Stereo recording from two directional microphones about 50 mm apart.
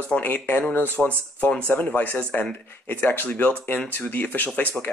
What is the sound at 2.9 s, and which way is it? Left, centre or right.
Speech, left.